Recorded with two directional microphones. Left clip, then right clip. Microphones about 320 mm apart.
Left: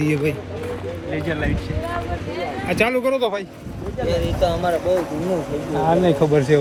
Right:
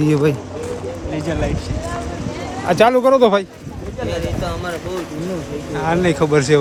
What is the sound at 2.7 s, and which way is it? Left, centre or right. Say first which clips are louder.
Speech: right 8 dB; centre.